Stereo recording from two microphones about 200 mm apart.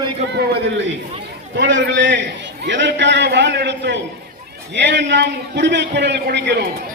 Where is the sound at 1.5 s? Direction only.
65° right (ahead or behind).